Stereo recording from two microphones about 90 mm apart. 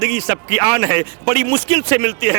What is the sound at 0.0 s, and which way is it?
A man's voice, 20° right (ahead or behind).